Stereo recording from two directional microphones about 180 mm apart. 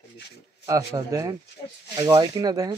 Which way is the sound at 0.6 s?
20° right (ahead or behind).